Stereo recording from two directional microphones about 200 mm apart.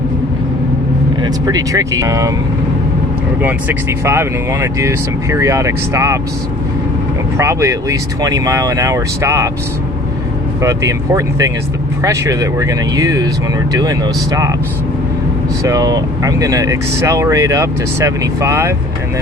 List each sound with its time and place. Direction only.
1.2 s speech: 20° right (ahead or behind)
3.4 s speech: 10° right (ahead or behind)
7.3 s speech: 15° right (ahead or behind)
10.6 s speech: 15° right (ahead or behind)
15.6 s speech: 15° right (ahead or behind)